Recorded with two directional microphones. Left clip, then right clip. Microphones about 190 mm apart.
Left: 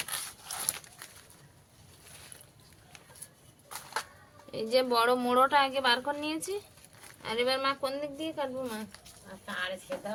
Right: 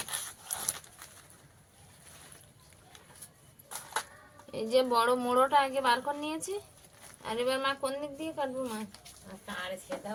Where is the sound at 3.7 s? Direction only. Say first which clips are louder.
Even; 10° right (ahead or behind).